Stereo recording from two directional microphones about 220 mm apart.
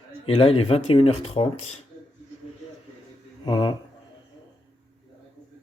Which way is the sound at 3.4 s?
20° left (ahead or behind).